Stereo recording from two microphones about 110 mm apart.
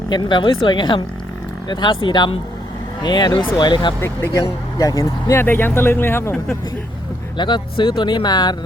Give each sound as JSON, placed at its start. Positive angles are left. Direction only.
{"t": 0.1, "sound": "speech", "side_deg": 45}
{"t": 4.4, "sound": "speech", "side_deg": 30}
{"t": 7.3, "sound": "speech", "side_deg": 45}